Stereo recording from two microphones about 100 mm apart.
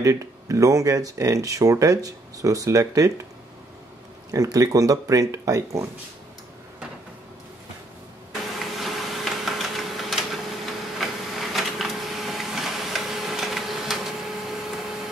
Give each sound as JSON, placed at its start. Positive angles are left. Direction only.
{"t": 0.0, "sound": "speech", "side_deg": -35}
{"t": 4.3, "sound": "speech", "side_deg": -35}
{"t": 8.5, "sound": "a sound", "side_deg": 0}
{"t": 11.0, "sound": "printer", "side_deg": 0}